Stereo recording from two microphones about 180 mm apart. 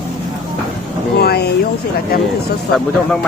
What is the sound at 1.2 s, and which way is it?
Speech, 60° left (ahead or behind).